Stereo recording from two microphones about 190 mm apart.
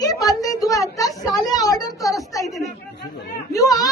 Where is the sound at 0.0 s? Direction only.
20° left (ahead or behind).